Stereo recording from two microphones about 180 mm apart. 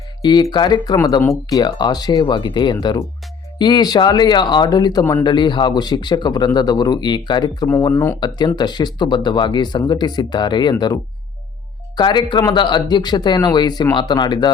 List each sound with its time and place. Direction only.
0.2 s speech: 25° left (ahead or behind)
11.9 s speech: 25° left (ahead or behind)